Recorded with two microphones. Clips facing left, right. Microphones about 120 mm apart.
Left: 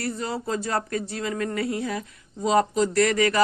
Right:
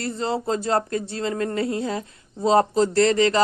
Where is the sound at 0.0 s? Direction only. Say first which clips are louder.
Right 4 dB; 25° right (ahead or behind).